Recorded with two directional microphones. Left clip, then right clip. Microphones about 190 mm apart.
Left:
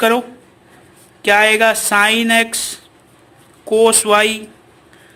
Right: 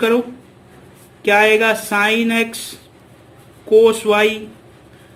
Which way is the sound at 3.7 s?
50° left (ahead or behind).